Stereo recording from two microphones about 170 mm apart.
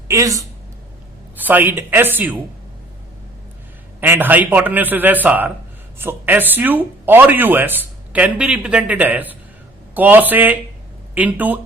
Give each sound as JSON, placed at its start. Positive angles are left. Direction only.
{"t": 0.1, "sound": "speech", "side_deg": -20}
{"t": 4.0, "sound": "speech", "side_deg": -10}